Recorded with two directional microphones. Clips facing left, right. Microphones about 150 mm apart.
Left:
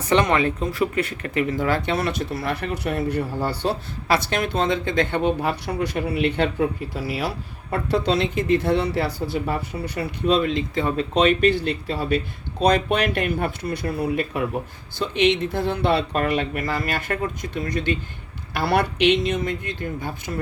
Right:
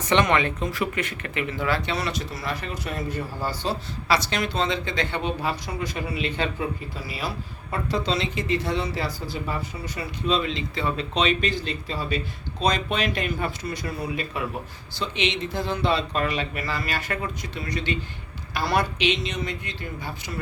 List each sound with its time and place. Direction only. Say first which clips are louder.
0.1 s speech: left 2 dB; 35° left (ahead or behind)
18.5 s speech: left 3 dB; 60° left (ahead or behind)